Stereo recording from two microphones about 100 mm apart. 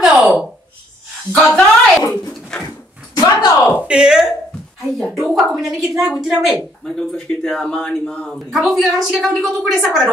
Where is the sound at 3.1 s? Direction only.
40° left (ahead or behind).